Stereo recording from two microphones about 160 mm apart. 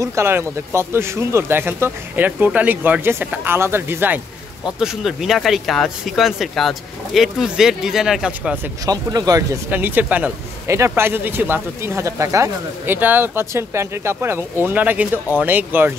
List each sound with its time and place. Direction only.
0.0 s a man's voice: 15° right (ahead or behind)
4.7 s speech: 5° right (ahead or behind)
8.8 s speech: 25° right (ahead or behind)
9.7 s a man's voice: 10° right (ahead or behind)